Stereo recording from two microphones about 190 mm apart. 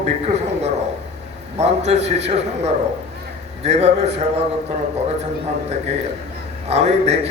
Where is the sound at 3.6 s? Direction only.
35° right (ahead or behind).